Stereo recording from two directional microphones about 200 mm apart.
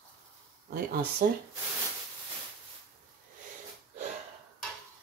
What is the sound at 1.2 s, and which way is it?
Speech, 50° right (ahead or behind).